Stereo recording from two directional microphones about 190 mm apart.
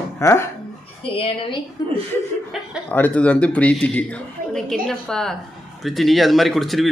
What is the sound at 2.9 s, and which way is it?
Speech, 10° left (ahead or behind).